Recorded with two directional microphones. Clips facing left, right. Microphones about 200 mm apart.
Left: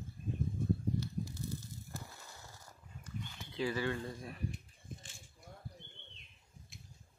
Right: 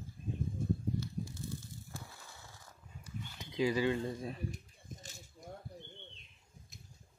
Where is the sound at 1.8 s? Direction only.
Centre (ahead or behind).